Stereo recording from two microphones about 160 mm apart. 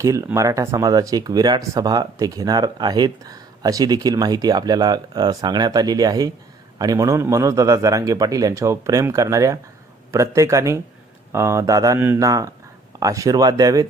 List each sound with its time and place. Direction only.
0.0 s speech: 20° right (ahead or behind)